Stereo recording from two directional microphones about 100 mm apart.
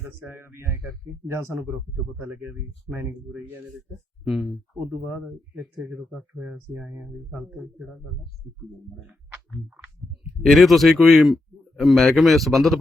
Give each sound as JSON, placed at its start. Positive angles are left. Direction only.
{"t": 0.0, "sound": "speech", "side_deg": -20}
{"t": 2.0, "sound": "speech", "side_deg": -25}
{"t": 4.2, "sound": "speech", "side_deg": 0}
{"t": 5.8, "sound": "speech", "side_deg": 0}
{"t": 6.4, "sound": "speech", "side_deg": -10}
{"t": 7.6, "sound": "speech", "side_deg": -5}
{"t": 10.4, "sound": "speech", "side_deg": 0}